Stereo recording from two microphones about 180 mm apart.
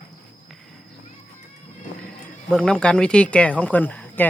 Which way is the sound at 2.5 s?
5° left (ahead or behind).